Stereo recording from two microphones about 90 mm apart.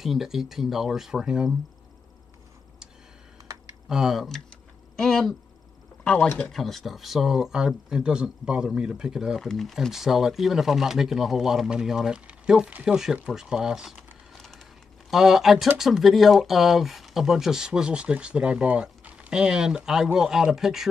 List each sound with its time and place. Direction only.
0.0 s speech: 5° right (ahead or behind)
3.9 s speech: 5° right (ahead or behind)
6.3 s speech: 5° left (ahead or behind)
14.3 s a sound: 5° left (ahead or behind)
15.0 s speech: 5° right (ahead or behind)